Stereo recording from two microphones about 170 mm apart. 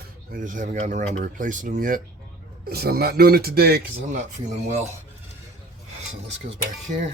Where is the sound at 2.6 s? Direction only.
65° right (ahead or behind).